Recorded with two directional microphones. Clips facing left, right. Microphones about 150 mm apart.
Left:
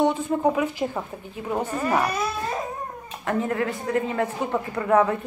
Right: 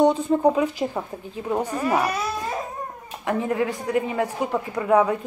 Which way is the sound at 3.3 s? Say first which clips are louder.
Right 1 dB; 15° right (ahead or behind).